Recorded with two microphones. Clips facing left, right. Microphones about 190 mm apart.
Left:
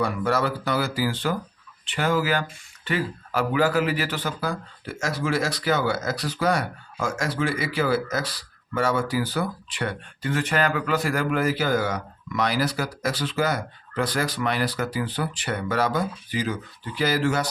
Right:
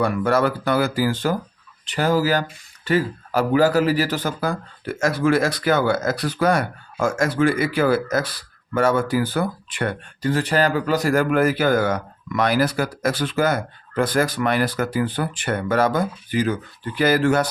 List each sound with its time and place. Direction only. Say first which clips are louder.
0.0 s speech: right 5 dB; 55° right (ahead or behind)
10.2 s speech: right 4 dB; 35° right (ahead or behind); by 17.5 s 55° right (ahead or behind)